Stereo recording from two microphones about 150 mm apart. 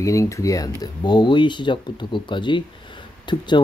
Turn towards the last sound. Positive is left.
turn(degrees=30)  # may be behind; listen again after turning